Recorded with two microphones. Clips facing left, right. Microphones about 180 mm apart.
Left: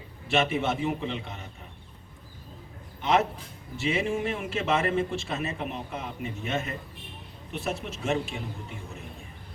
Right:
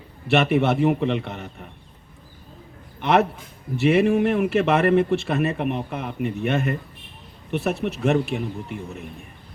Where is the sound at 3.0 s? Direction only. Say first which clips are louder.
Right 5 dB; 65° right (ahead or behind).